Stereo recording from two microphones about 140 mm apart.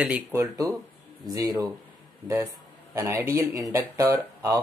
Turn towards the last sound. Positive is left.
turn(degrees=-20)  # may be behind; listen again after turning